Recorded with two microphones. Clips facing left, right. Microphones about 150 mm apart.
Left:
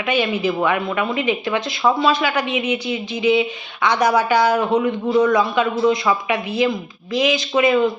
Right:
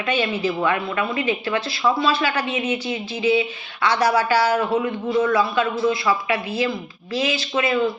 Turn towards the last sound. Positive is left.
turn(degrees=15)  # may be behind; listen again after turning